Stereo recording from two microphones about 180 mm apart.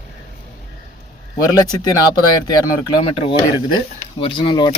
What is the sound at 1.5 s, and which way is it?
Speech, 20° left (ahead or behind).